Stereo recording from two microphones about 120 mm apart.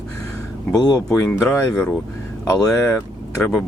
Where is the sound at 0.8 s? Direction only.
35° left (ahead or behind).